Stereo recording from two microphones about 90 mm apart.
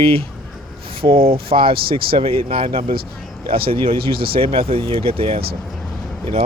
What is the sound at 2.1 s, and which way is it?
Speech, 90° right.